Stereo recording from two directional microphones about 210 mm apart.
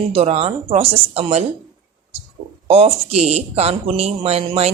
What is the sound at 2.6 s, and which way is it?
A woman's voice, 30° right (ahead or behind).